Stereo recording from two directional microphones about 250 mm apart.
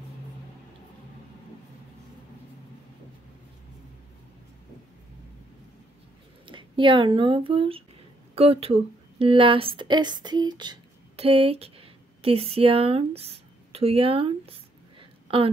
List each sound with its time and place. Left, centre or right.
6.4 s a woman's voice: centre